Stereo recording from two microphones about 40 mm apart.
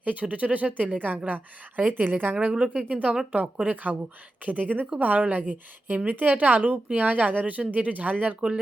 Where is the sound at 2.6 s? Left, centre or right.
Right.